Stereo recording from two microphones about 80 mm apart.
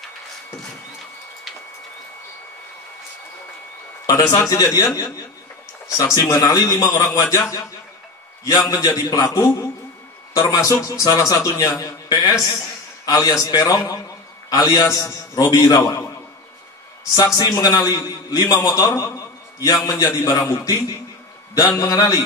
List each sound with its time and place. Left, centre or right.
4.0 s a man's voice: left
8.5 s a man's voice: left
12.1 s a man's voice: left
13.0 s a man's voice: left
17.1 s a man's voice: left